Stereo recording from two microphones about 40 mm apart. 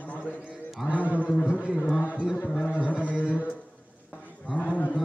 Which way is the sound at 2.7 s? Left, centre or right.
Left.